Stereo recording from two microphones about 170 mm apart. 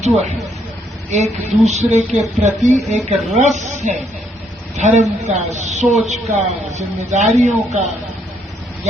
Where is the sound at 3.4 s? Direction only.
45° right (ahead or behind).